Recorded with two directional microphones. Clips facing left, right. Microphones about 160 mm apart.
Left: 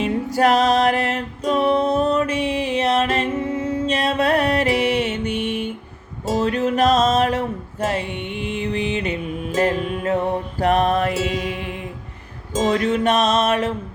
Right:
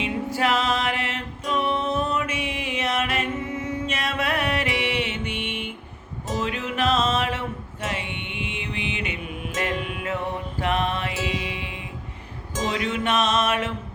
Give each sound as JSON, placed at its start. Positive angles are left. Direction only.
{"t": 0.0, "sound": "music", "side_deg": 40}